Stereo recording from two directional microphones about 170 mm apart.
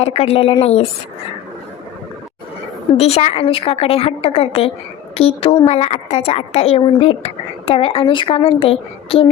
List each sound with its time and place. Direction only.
0.0 s a woman's voice: 35° left (ahead or behind)
3.0 s a woman's voice: 40° left (ahead or behind)